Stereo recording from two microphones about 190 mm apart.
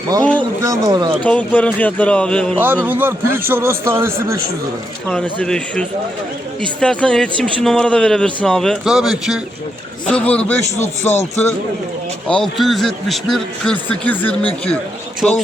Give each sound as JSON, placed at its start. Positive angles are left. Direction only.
{"t": 0.2, "sound": "speech", "side_deg": 5}
{"t": 0.6, "sound": "speech", "side_deg": -20}
{"t": 1.2, "sound": "speech", "side_deg": 5}
{"t": 2.8, "sound": "a man's voice", "side_deg": -10}
{"t": 5.0, "sound": "a man's voice", "side_deg": 5}
{"t": 12.3, "sound": "a man's voice", "side_deg": 0}